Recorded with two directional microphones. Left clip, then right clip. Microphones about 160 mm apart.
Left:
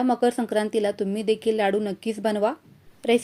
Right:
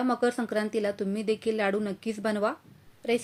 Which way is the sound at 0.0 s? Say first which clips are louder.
Left 5 dB; 25° left (ahead or behind).